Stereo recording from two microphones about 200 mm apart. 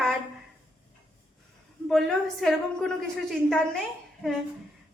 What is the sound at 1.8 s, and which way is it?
A woman's voice, centre (ahead or behind).